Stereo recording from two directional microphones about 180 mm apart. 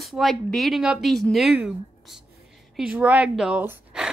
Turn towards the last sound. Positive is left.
turn(degrees=-10)  # may be behind; listen again after turning